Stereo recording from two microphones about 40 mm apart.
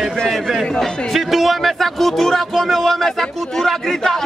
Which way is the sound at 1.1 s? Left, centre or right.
Centre.